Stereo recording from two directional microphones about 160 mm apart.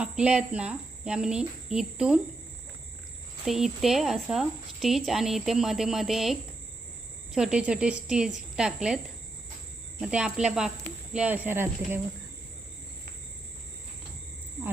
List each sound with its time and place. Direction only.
0.0 s speech: 5° right (ahead or behind)
3.4 s speech: centre (ahead or behind)
7.3 s a woman's voice: 5° right (ahead or behind)
10.0 s a woman's voice: 5° right (ahead or behind)